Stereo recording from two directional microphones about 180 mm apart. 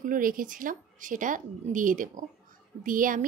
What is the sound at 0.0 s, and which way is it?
A woman's voice, 50° right (ahead or behind).